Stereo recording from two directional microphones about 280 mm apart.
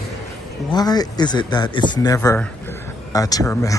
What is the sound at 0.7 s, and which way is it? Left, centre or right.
Speech, centre.